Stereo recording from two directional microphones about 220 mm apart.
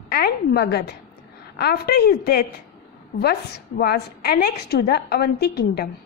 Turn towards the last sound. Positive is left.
turn(degrees=45)  # may be behind; listen again after turning